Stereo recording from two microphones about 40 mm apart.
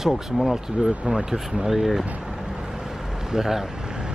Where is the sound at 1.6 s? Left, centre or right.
Centre.